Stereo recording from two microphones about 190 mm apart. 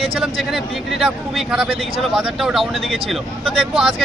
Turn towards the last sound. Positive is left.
turn(degrees=-5)  # may be behind; listen again after turning